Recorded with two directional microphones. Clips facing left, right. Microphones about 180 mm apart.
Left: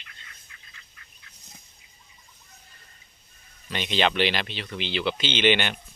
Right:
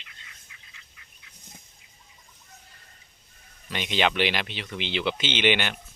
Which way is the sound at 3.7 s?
10° right (ahead or behind).